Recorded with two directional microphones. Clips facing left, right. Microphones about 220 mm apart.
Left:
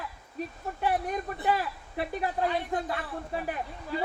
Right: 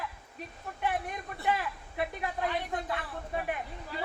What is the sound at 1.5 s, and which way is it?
Speech, 35° left (ahead or behind).